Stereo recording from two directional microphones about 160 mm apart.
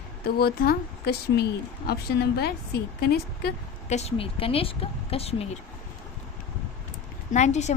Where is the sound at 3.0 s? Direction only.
75° left (ahead or behind).